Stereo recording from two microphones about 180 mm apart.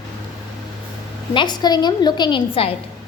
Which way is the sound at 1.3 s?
25° left (ahead or behind).